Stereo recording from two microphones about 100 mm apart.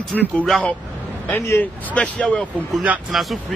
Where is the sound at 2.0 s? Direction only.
10° left (ahead or behind).